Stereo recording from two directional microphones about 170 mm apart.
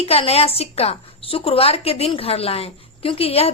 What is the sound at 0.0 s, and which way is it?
A woman's voice, 35° left (ahead or behind).